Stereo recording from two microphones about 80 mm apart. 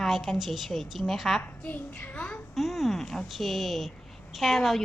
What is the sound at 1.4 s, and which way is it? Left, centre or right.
A child's voice, left.